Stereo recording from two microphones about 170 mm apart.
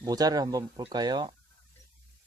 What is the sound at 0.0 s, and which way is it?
Speech, 20° right (ahead or behind).